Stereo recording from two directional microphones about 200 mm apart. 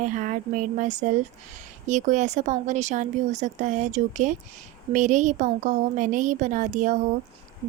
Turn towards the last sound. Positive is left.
turn(degrees=-40)  # may be behind; listen again after turning